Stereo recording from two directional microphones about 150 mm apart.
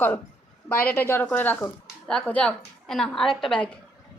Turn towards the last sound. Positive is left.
turn(degrees=5)  # may be behind; listen again after turning